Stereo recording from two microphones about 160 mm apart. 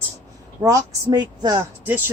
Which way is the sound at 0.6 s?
20° right (ahead or behind).